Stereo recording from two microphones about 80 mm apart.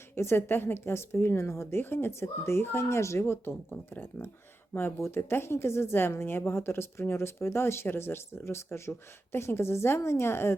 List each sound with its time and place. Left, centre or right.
0.2 s a woman's voice: left